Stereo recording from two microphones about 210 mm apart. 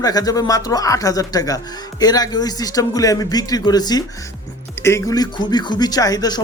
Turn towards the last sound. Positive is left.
turn(degrees=20)  # may be behind; listen again after turning